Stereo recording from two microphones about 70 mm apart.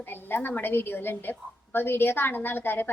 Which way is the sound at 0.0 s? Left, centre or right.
Left.